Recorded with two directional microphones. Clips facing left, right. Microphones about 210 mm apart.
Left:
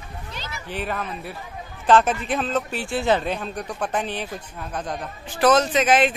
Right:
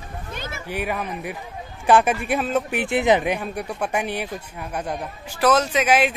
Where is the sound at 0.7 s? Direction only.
10° right (ahead or behind).